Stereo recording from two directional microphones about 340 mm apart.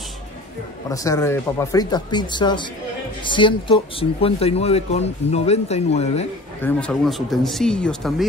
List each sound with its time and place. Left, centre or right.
0.8 s speech: centre
6.6 s speech: centre